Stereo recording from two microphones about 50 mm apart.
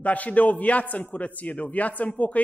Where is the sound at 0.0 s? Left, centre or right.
Left.